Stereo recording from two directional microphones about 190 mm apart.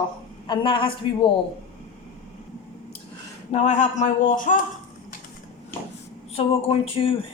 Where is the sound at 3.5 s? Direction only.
40° left (ahead or behind).